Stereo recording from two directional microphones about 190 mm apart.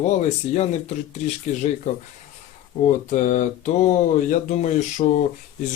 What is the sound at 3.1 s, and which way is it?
Speech, 40° left (ahead or behind).